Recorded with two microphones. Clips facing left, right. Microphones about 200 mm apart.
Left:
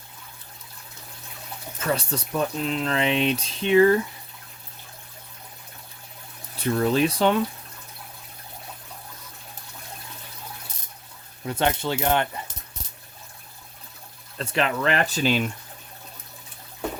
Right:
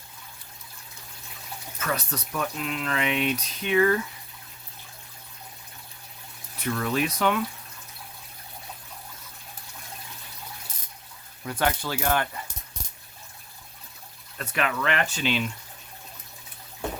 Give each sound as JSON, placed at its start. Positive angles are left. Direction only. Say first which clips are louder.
{"t": 1.8, "sound": "speech", "louder": "left 4 dB", "side_deg": 30}
{"t": 6.6, "sound": "speech", "louder": "left 5 dB", "side_deg": 30}
{"t": 11.4, "sound": "speech", "louder": "left 3 dB", "side_deg": 25}
{"t": 14.3, "sound": "speech", "louder": "left 3 dB", "side_deg": 30}